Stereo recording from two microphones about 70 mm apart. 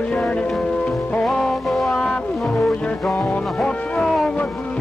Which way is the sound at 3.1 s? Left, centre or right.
Centre.